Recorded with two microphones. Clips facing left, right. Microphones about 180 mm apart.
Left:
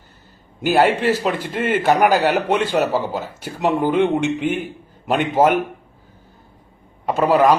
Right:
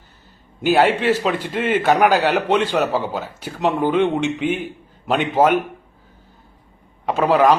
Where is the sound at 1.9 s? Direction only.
10° left (ahead or behind).